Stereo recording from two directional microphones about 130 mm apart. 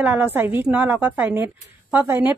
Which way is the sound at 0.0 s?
15° right (ahead or behind).